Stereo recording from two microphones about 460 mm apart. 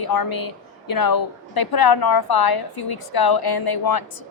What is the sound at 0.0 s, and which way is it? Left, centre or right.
A woman's voice, left.